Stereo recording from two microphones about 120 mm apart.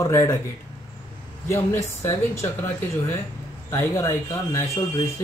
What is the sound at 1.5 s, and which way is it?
Speech, 25° left (ahead or behind).